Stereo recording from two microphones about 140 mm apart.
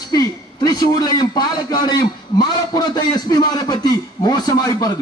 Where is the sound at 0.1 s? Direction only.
30° left (ahead or behind).